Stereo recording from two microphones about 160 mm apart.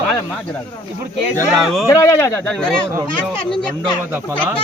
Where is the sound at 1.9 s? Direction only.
15° left (ahead or behind).